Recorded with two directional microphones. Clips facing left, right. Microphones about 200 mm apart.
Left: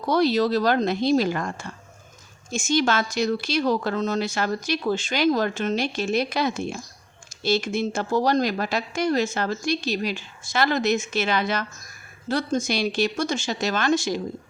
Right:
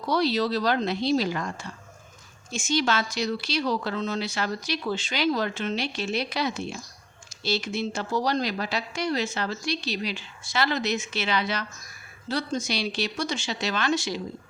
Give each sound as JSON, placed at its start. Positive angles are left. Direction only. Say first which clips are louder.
{"t": 0.0, "sound": "speech", "louder": "left 4 dB", "side_deg": 50}